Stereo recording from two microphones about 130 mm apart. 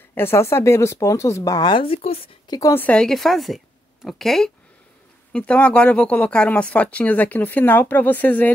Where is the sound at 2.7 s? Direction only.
10° left (ahead or behind).